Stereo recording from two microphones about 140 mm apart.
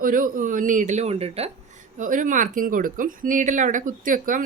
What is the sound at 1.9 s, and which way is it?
A woman's voice, 65° right (ahead or behind).